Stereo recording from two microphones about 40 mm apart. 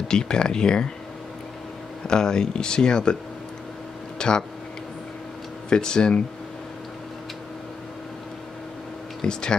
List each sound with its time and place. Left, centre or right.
0.1 s speech: centre
2.0 s speech: centre
4.2 s speech: left
5.7 s speech: centre
9.2 s speech: centre